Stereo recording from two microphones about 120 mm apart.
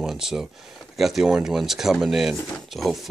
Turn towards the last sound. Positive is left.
turn(degrees=0)  # may be behind; listen again after turning